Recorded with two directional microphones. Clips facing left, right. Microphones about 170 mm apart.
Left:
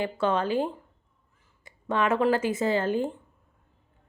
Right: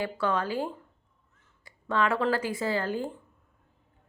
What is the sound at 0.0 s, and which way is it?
Speech, 20° left (ahead or behind).